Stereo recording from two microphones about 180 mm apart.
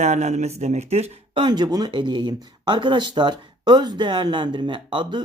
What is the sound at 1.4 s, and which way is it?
Speech, 25° right (ahead or behind).